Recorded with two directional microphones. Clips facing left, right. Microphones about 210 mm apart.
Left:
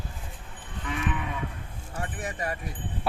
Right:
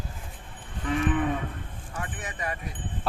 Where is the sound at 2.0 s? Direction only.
40° left (ahead or behind).